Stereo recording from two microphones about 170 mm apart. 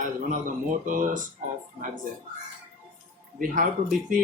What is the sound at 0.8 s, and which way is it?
Speech, 50° right (ahead or behind).